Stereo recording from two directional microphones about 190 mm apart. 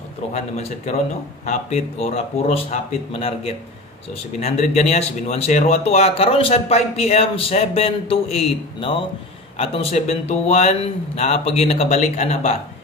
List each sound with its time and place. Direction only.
0.6 s speech: 35° left (ahead or behind)